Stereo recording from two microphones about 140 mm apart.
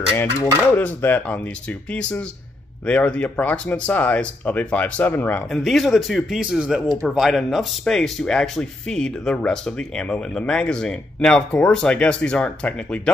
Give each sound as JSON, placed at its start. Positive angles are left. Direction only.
{"t": 0.2, "sound": "speech", "side_deg": 15}
{"t": 5.6, "sound": "speech", "side_deg": 0}